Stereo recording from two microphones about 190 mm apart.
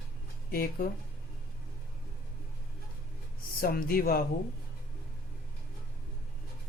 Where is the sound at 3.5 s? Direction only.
50° left (ahead or behind).